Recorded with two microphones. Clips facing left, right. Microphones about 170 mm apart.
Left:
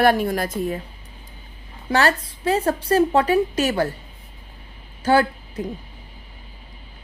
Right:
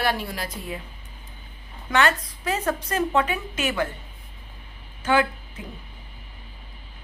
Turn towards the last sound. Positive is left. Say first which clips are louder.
# left 4 dB
turn(degrees=40)  # may be behind; listen again after turning